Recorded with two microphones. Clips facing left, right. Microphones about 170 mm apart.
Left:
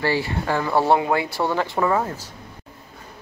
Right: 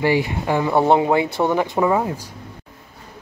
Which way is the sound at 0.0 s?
15° right (ahead or behind).